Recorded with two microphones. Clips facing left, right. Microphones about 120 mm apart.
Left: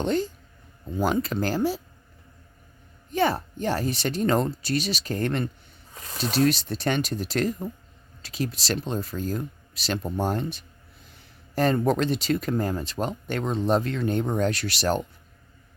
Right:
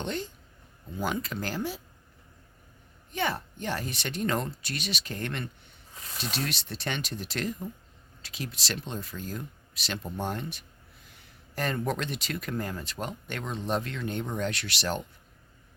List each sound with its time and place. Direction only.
0.0 s speech: 40° left (ahead or behind)
3.1 s speech: 35° left (ahead or behind)